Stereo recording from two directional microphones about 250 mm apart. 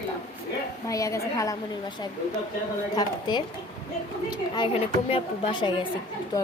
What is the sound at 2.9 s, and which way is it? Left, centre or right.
Speech, centre.